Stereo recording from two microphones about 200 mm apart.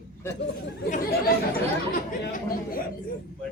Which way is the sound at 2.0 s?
45° left (ahead or behind).